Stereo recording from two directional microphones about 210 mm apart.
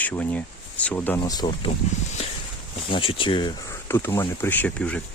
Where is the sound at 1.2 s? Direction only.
20° left (ahead or behind).